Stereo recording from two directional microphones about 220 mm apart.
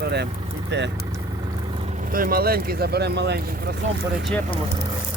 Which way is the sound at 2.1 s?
40° right (ahead or behind).